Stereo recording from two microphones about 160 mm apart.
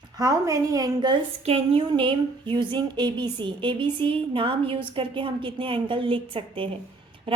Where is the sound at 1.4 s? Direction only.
35° right (ahead or behind).